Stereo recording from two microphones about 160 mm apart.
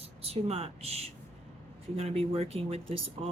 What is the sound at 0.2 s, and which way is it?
Speech, 40° right (ahead or behind).